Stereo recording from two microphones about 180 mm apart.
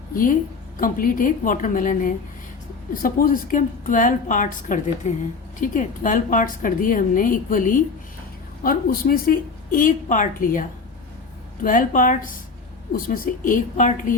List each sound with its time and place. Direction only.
0.1 s a woman's voice: 50° left (ahead or behind)
11.6 s a woman's voice: 50° left (ahead or behind)